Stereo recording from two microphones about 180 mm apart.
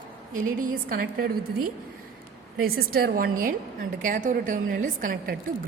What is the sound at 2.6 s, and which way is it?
A woman's voice, 55° right (ahead or behind).